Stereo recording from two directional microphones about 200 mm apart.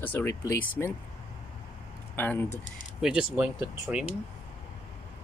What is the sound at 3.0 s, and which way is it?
Speech, 5° right (ahead or behind).